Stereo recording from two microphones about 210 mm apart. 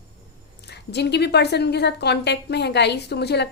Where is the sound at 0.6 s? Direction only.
50° left (ahead or behind).